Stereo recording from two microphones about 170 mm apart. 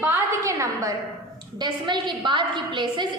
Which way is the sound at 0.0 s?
15° right (ahead or behind).